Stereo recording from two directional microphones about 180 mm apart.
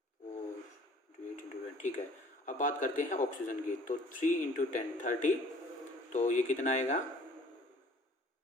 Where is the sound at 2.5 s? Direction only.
45° left (ahead or behind).